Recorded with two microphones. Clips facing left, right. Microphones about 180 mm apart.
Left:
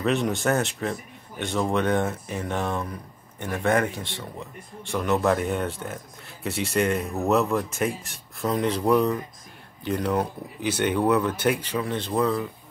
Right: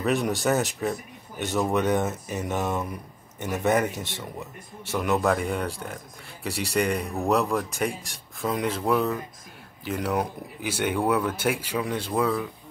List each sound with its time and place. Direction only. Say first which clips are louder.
0.0 s speech: even; 5° right (ahead or behind)
3.9 s speech: even; 45° right (ahead or behind)
4.4 s speech: even; 5° right (ahead or behind)